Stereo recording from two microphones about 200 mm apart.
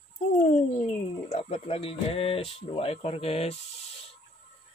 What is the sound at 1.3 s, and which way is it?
Speech, 30° left (ahead or behind).